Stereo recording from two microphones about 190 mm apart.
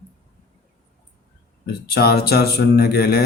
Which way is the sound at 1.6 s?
55° left (ahead or behind).